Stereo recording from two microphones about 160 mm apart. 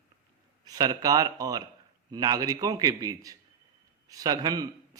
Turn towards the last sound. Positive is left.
turn(degrees=-25)  # may be behind; listen again after turning